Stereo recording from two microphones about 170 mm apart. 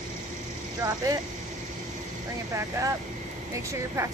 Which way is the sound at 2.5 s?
20° right (ahead or behind).